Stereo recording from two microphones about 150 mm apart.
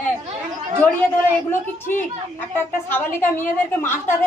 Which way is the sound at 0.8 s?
10° left (ahead or behind).